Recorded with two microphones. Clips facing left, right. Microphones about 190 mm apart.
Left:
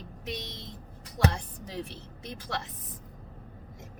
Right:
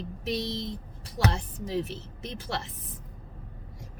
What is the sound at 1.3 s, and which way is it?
Speech, 20° right (ahead or behind).